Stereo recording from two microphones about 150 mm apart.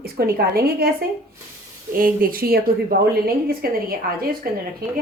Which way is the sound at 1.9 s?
70° right (ahead or behind).